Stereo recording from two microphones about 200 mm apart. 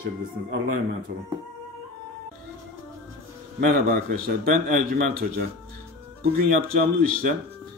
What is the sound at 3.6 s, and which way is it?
A man's voice, 45° right (ahead or behind).